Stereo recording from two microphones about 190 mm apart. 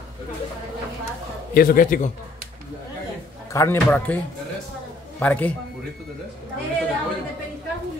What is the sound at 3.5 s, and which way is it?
Speech, 10° left (ahead or behind).